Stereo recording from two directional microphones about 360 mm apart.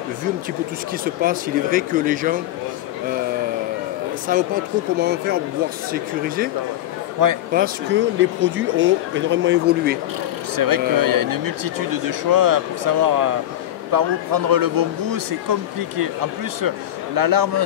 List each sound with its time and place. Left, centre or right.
1.2 s speech: right
4.3 s speech: right
6.2 s speech: right
7.2 s speech: right
7.5 s speech: right
10.5 s speech: right
16.6 s a man's voice: right